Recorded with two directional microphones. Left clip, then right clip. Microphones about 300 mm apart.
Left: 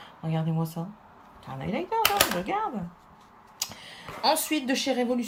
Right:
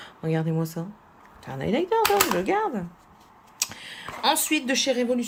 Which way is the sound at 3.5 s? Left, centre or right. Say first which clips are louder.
Right 5 dB; centre.